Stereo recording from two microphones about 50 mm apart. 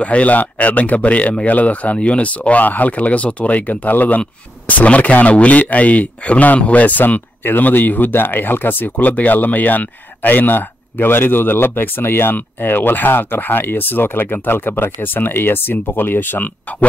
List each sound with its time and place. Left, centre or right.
0.0 s speech: left